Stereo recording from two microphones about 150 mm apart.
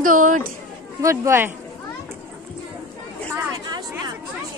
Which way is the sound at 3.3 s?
25° right (ahead or behind).